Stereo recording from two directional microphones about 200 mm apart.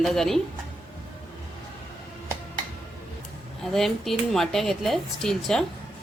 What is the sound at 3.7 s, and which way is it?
A woman's voice, centre (ahead or behind).